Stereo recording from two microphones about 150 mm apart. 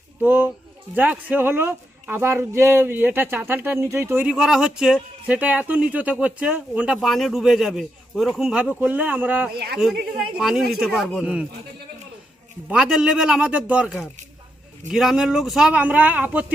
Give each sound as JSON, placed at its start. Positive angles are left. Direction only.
{"t": 0.2, "sound": "speech", "side_deg": -15}
{"t": 9.5, "sound": "speech", "side_deg": -90}
{"t": 9.7, "sound": "speech", "side_deg": -5}
{"t": 12.6, "sound": "speech", "side_deg": -5}